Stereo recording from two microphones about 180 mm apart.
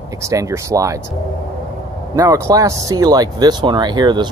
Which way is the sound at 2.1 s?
15° right (ahead or behind).